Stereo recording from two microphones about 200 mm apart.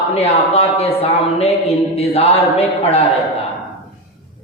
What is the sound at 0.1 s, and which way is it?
Speech, 30° left (ahead or behind).